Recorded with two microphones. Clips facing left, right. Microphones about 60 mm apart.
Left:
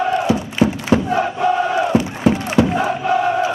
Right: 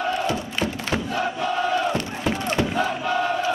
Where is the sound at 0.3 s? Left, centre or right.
Centre.